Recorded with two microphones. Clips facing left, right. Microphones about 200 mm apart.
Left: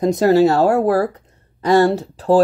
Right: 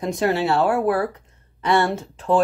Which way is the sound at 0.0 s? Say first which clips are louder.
Left 8 dB; 40° left (ahead or behind).